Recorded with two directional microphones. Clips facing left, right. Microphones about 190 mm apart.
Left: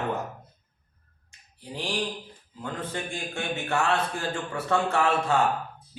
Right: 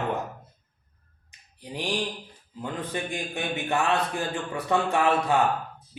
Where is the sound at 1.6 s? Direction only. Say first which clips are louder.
Right 1 dB; 15° right (ahead or behind).